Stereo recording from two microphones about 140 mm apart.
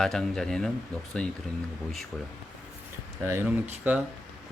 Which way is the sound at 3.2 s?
20° right (ahead or behind).